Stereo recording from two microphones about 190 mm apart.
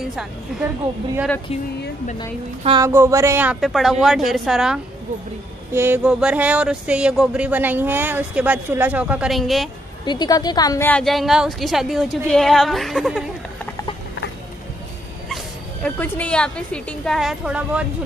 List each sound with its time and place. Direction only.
0.1 s speech: centre (ahead or behind)
2.8 s speech: 15° right (ahead or behind)
10.0 s a woman's voice: 20° left (ahead or behind)
10.9 s speech: 5° left (ahead or behind)
15.2 s speech: 5° left (ahead or behind)